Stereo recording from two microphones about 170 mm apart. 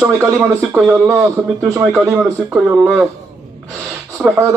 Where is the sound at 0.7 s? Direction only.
Centre (ahead or behind).